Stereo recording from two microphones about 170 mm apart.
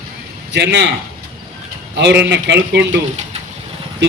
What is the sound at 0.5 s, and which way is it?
Speech, 90° right.